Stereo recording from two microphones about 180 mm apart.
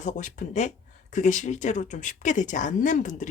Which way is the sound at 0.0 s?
45° left (ahead or behind).